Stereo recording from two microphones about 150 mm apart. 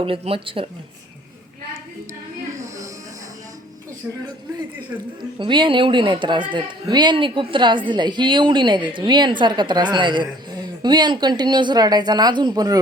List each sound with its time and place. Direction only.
0.0 s a woman's voice: 40° right (ahead or behind)
5.4 s a woman's voice: 30° right (ahead or behind)